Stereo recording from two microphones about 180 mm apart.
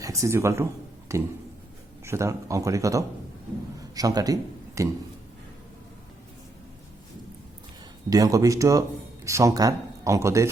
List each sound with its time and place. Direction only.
0.0 s a man's voice: 15° right (ahead or behind)
8.1 s speech: 20° right (ahead or behind)